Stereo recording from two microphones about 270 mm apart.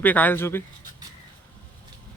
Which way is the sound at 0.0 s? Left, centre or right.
Centre.